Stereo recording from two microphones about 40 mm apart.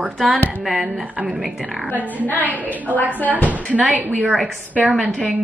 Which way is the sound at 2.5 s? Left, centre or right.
Right.